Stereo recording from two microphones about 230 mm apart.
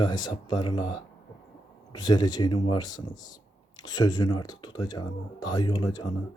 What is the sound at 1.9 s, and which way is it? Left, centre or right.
Speech, centre.